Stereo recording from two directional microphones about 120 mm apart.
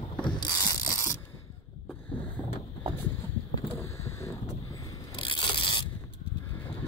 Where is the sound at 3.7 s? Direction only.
25° left (ahead or behind).